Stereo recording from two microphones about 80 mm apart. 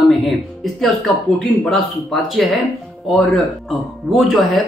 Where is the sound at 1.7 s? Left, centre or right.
Centre.